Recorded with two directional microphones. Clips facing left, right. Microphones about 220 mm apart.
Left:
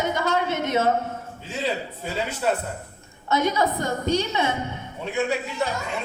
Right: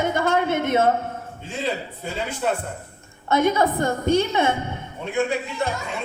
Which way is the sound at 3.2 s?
55° right (ahead or behind).